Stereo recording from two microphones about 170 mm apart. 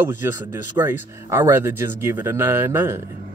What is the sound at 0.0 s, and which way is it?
Speech, 10° right (ahead or behind).